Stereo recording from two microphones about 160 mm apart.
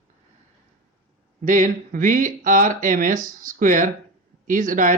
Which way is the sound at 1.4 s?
55° right (ahead or behind).